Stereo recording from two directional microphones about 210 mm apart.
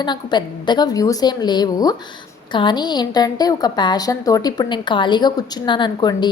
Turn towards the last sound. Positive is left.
turn(degrees=20)  # may be behind; listen again after turning